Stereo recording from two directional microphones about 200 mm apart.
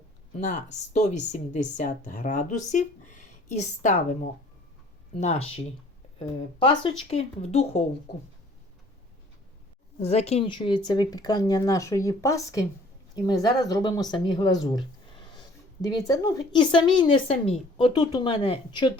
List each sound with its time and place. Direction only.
0.3 s a woman's voice: 35° left (ahead or behind)
5.2 s a woman's voice: 30° left (ahead or behind)
10.0 s speech: 30° left (ahead or behind)